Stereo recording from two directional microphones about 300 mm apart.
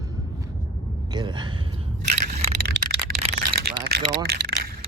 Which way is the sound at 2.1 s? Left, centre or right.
Right.